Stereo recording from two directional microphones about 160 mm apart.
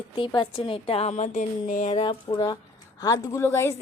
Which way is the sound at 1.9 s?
35° left (ahead or behind).